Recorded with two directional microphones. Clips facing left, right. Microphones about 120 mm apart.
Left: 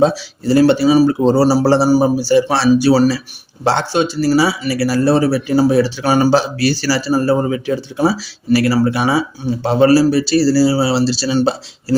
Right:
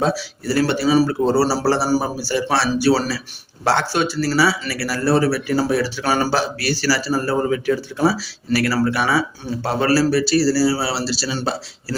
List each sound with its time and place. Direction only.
0.0 s speech: 20° left (ahead or behind)